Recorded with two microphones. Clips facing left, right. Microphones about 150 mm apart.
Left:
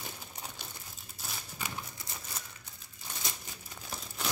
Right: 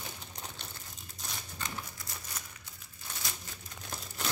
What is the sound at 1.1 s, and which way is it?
Crumpling, 5° left (ahead or behind).